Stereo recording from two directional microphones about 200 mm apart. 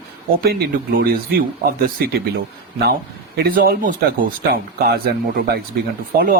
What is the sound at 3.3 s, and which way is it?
Speech, 50° right (ahead or behind).